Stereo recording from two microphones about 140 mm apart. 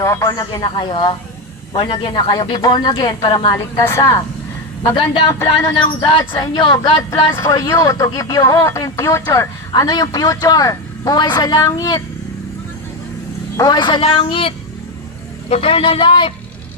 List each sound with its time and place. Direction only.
0.0 s a woman's voice: 20° left (ahead or behind)
3.8 s speech: 20° left (ahead or behind)
4.8 s a woman's voice: 40° left (ahead or behind)
7.6 s speech: 20° left (ahead or behind)
13.6 s a woman's voice: 30° left (ahead or behind)